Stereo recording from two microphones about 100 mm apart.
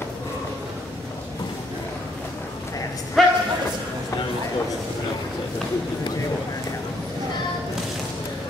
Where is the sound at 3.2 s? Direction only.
Centre (ahead or behind).